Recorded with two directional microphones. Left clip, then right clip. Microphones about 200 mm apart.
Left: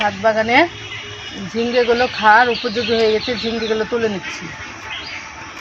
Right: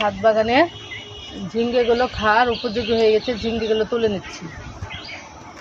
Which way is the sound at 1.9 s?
25° right (ahead or behind).